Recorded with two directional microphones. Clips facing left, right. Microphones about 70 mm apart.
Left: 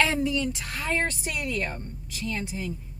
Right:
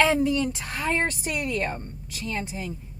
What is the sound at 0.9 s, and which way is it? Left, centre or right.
Speech, right.